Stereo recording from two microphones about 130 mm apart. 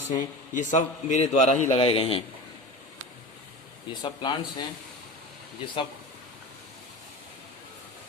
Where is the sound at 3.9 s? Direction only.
35° left (ahead or behind).